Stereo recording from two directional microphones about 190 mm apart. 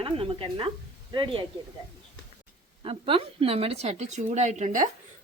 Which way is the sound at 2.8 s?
30° right (ahead or behind).